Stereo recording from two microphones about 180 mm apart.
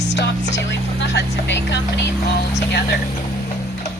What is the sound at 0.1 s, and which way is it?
Speech, 75° left (ahead or behind).